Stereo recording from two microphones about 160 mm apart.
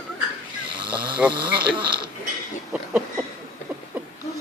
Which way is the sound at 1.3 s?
30° right (ahead or behind).